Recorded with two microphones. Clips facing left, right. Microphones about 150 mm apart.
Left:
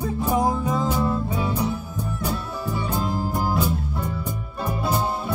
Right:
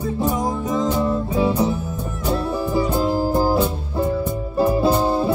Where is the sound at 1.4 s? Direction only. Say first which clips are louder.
Right 6 dB; 30° right (ahead or behind).